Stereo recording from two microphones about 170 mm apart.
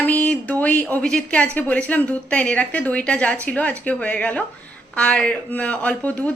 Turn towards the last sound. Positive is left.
turn(degrees=10)  # may be behind; listen again after turning